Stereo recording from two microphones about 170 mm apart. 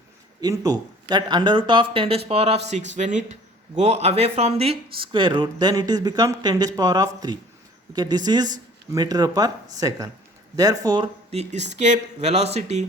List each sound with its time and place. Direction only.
0.4 s speech: 20° right (ahead or behind); by 12.8 s 40° right (ahead or behind)